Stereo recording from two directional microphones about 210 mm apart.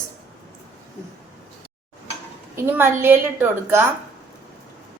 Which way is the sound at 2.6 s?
10° right (ahead or behind).